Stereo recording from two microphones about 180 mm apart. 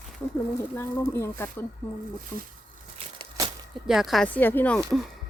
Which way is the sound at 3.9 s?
Centre (ahead or behind).